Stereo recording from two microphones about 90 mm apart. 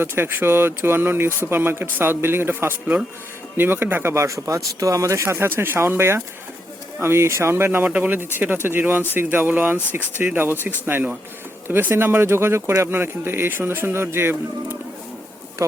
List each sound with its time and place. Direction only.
0.0 s speech: 25° right (ahead or behind)